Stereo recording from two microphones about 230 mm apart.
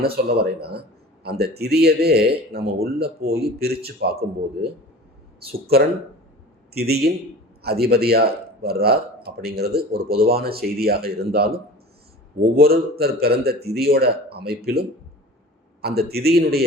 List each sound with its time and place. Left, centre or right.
0.0 s speech: right
6.7 s speech: right